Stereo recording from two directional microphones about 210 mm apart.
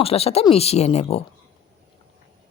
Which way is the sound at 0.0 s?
30° left (ahead or behind).